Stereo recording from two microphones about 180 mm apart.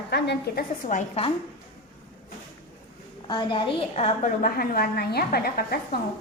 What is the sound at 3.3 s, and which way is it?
Speech, 25° left (ahead or behind).